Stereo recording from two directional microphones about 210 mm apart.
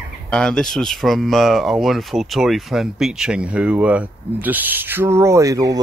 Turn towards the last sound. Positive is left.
turn(degrees=-15)  # may be behind; listen again after turning